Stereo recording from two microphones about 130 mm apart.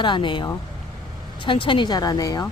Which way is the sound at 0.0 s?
35° left (ahead or behind).